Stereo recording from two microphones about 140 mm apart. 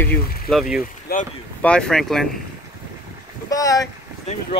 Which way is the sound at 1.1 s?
90° left.